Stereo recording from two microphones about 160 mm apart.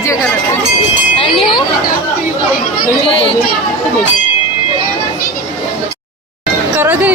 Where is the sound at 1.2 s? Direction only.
35° left (ahead or behind).